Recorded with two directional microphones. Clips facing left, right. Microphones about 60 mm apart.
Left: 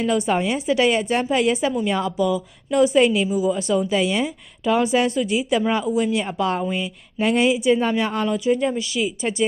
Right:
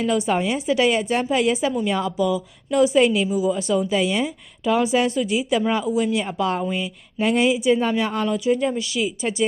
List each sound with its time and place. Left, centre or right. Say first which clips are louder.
0.0 s a woman's voice: even; left
3.6 s a woman's voice: even; left